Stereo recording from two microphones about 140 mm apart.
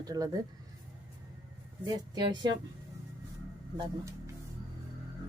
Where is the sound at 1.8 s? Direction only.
30° right (ahead or behind).